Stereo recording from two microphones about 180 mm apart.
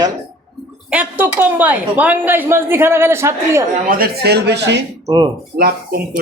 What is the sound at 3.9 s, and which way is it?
Speech, 60° right (ahead or behind).